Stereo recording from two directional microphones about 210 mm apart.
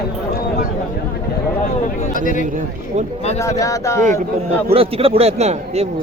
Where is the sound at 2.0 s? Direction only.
40° left (ahead or behind).